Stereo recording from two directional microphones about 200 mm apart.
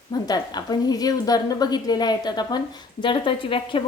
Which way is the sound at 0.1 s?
20° left (ahead or behind).